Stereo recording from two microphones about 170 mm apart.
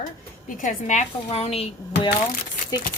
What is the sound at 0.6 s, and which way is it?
Speech, 45° left (ahead or behind).